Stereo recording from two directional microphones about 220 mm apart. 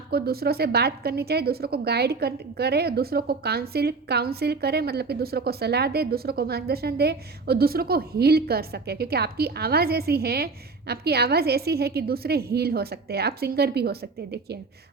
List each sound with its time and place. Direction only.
0.1 s a woman's voice: 45° right (ahead or behind)